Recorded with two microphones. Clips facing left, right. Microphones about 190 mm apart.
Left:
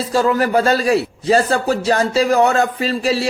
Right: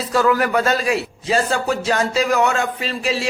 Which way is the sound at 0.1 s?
30° left (ahead or behind).